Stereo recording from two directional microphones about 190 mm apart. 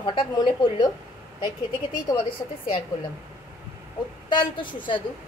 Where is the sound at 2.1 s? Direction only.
25° left (ahead or behind).